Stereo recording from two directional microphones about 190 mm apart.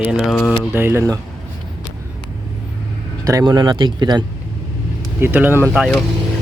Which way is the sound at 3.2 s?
20° right (ahead or behind).